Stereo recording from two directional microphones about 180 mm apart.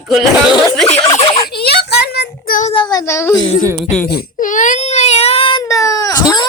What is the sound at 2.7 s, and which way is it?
Speech, 20° left (ahead or behind).